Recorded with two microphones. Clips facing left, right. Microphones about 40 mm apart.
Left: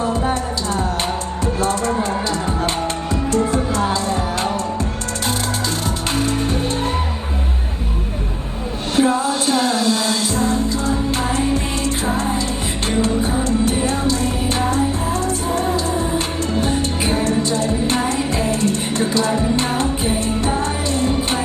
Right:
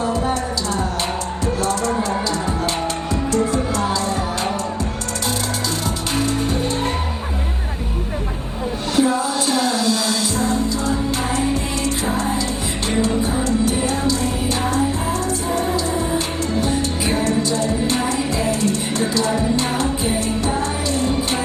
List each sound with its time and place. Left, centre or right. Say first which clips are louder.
0.0 s music: left 1 dB; left
3.3 s music: left 1 dB; left
9.0 s music: left 2 dB; left
12.0 s music: left 1 dB; left
13.7 s music: left 1 dB; left
15.5 s music: even; left